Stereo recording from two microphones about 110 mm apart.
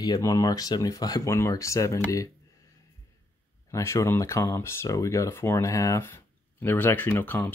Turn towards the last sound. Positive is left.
turn(degrees=20)  # may be behind; listen again after turning